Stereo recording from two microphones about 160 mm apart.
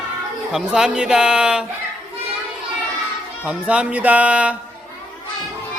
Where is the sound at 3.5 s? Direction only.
5° right (ahead or behind).